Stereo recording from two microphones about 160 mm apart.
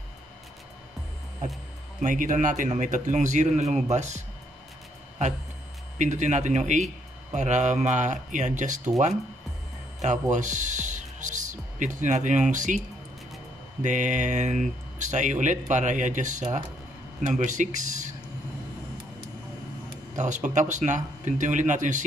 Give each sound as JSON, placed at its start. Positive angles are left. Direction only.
{"t": 2.0, "sound": "speech", "side_deg": -55}
{"t": 5.2, "sound": "speech", "side_deg": -50}
{"t": 10.3, "sound": "speech", "side_deg": -50}
{"t": 13.8, "sound": "speech", "side_deg": -50}
{"t": 20.2, "sound": "speech", "side_deg": -50}